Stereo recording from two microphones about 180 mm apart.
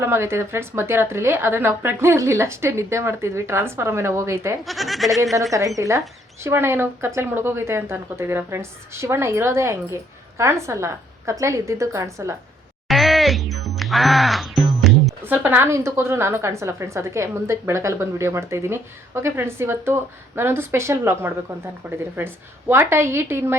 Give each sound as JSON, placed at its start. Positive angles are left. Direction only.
{"t": 0.0, "sound": "a woman's voice", "side_deg": -15}
{"t": 4.6, "sound": "speech", "side_deg": 0}
{"t": 5.5, "sound": "a woman's voice", "side_deg": -20}
{"t": 12.9, "sound": "music", "side_deg": 0}
{"t": 15.2, "sound": "a woman's voice", "side_deg": -10}